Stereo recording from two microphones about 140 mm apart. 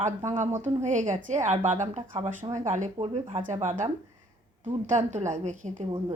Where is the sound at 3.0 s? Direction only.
40° right (ahead or behind).